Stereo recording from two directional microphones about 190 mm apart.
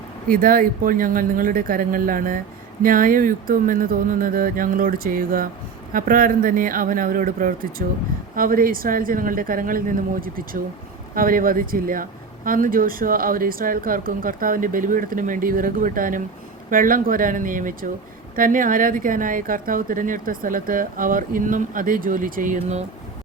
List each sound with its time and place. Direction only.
0.3 s speech: 50° right (ahead or behind)